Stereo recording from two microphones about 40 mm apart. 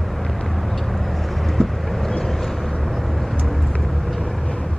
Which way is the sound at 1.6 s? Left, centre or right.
Centre.